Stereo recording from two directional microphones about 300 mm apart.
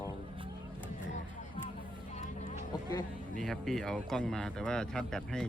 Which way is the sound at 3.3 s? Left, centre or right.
Centre.